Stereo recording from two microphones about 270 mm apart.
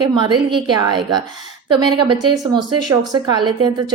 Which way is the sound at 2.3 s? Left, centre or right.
Centre.